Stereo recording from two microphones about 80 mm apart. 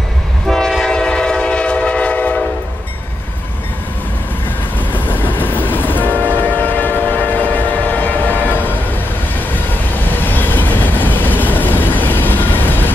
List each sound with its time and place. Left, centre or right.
0.5 s train: centre
4.7 s train: left
6.1 s train: right
6.4 s train: left